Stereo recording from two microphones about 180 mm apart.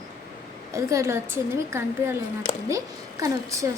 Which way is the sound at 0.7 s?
15° right (ahead or behind).